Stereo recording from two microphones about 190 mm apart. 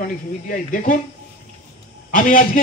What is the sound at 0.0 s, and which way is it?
Speech, 45° left (ahead or behind).